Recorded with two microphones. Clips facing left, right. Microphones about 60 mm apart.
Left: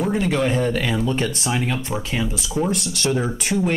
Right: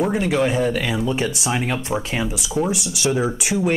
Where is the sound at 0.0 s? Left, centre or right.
Centre.